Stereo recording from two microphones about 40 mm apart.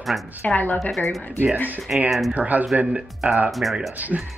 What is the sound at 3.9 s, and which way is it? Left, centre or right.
Speech, right.